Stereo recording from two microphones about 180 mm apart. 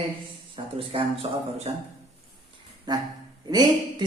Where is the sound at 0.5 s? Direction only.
30° right (ahead or behind).